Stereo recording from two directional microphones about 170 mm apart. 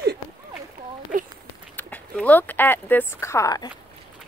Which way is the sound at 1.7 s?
10° left (ahead or behind).